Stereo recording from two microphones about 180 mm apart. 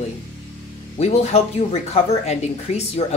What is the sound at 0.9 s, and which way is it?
Speech, 35° left (ahead or behind).